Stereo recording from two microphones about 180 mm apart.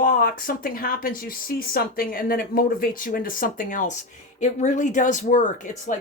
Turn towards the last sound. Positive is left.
turn(degrees=45)  # may be behind; listen again after turning